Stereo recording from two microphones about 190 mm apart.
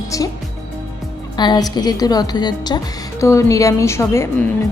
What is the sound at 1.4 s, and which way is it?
A woman's voice, 20° left (ahead or behind).